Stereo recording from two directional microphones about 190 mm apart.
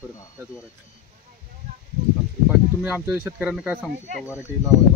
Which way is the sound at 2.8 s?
5° right (ahead or behind).